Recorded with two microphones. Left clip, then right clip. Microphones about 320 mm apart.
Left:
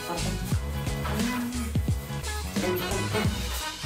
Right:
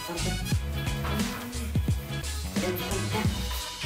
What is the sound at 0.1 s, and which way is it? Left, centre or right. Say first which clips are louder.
Music: left 1 dB; centre.